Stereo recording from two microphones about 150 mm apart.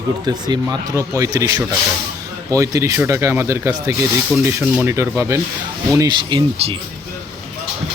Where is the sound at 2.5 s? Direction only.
20° right (ahead or behind).